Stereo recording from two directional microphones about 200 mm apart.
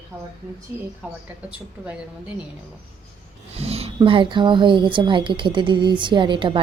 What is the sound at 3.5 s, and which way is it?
A woman's voice, 30° right (ahead or behind).